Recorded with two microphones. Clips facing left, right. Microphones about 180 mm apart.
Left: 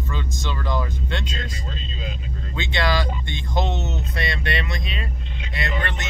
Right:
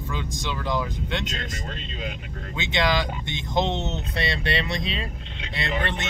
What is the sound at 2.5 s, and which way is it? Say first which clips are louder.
Speech: even; 20° right (ahead or behind).